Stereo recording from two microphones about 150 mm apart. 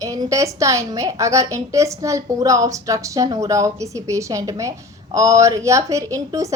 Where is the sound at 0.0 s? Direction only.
20° right (ahead or behind).